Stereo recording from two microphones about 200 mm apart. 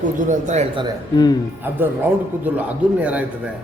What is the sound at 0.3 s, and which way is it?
Speech, 35° right (ahead or behind).